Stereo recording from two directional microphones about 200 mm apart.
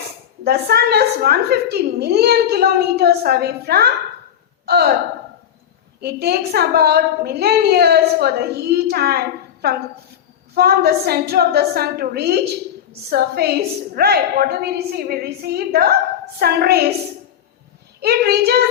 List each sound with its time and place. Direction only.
0.4 s a woman's voice: 50° right (ahead or behind)
6.0 s a woman's voice: 55° right (ahead or behind)
18.0 s a woman's voice: 55° right (ahead or behind)